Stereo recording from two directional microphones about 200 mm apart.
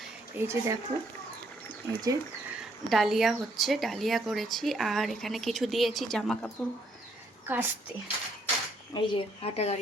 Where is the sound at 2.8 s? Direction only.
Centre (ahead or behind).